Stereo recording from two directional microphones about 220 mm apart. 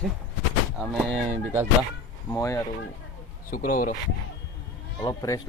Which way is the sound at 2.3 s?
15° left (ahead or behind).